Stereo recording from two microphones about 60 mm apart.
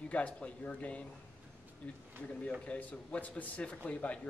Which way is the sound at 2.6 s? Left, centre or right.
Left.